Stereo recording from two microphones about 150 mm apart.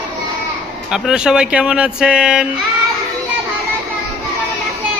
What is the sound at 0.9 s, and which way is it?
Speech, 5° right (ahead or behind).